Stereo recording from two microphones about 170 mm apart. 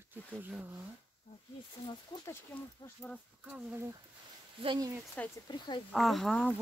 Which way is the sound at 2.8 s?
10° left (ahead or behind).